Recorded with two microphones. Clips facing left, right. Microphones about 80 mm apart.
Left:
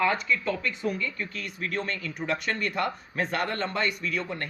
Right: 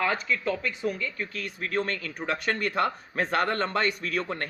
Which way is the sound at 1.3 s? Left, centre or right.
Right.